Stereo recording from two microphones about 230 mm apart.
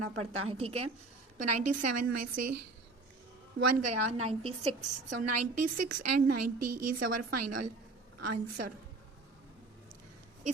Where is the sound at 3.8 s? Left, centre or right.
Right.